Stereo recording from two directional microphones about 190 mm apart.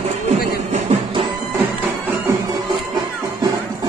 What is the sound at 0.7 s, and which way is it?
Music, 35° right (ahead or behind).